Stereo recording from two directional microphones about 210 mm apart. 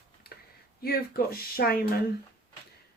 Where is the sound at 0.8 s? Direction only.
45° left (ahead or behind).